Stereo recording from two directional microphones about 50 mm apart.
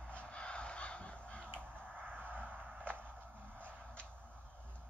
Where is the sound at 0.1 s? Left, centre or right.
Left.